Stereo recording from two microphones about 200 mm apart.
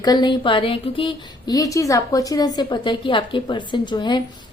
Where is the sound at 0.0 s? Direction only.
20° left (ahead or behind).